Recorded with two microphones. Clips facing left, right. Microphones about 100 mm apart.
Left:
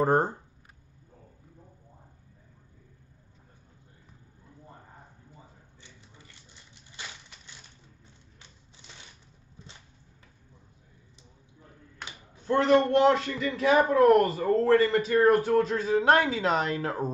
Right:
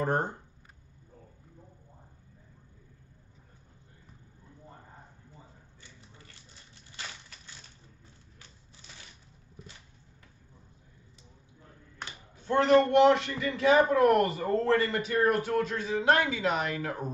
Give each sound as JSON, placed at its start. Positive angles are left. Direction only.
{"t": 0.0, "sound": "speech", "side_deg": 35}
{"t": 5.8, "sound": "a sound", "side_deg": 20}
{"t": 6.7, "sound": "crushing", "side_deg": 20}
{"t": 12.8, "sound": "speech", "side_deg": 35}
{"t": 13.3, "sound": "speech", "side_deg": -25}
{"t": 13.8, "sound": "speech", "side_deg": 30}